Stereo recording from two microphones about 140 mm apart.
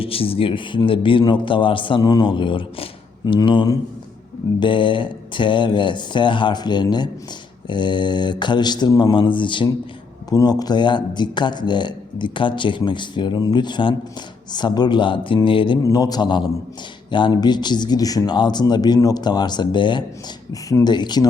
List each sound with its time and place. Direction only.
0.0 s a man's voice: 40° left (ahead or behind)